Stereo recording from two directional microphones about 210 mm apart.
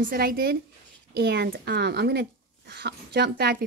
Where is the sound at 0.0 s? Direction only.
45° right (ahead or behind).